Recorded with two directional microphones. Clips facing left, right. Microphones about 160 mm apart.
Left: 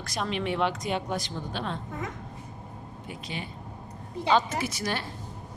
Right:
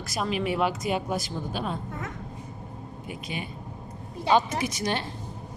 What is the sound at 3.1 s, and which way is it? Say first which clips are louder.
Speech: right 2 dB; 10° right (ahead or behind).